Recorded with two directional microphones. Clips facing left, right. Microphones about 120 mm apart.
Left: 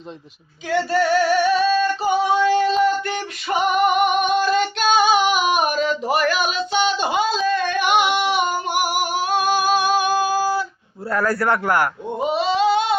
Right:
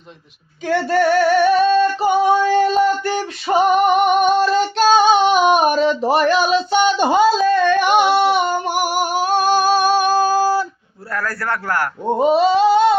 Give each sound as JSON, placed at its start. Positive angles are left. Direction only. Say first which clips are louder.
{"t": 0.7, "sound": "female singing", "louder": "right 3 dB", "side_deg": -50}
{"t": 3.1, "sound": "female singing", "louder": "right 5 dB", "side_deg": -30}
{"t": 8.5, "sound": "music", "louder": "right 3 dB", "side_deg": -40}
{"t": 11.1, "sound": "a man's voice", "louder": "left 4 dB", "side_deg": 20}
{"t": 12.0, "sound": "a sound", "louder": "right 7 dB", "side_deg": -40}